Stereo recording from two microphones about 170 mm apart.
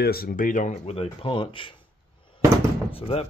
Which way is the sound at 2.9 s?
35° left (ahead or behind).